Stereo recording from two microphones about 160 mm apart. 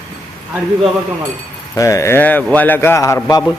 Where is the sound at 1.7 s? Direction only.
20° left (ahead or behind).